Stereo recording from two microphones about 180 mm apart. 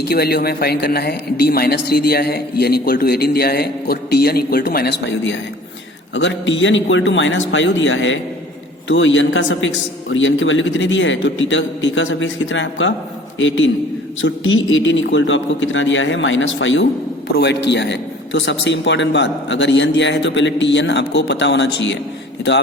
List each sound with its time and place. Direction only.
0.0 s a man's voice: 60° left (ahead or behind); by 12.9 s 90° left
14.2 s a man's voice: 90° left
17.3 s a man's voice: 65° left (ahead or behind)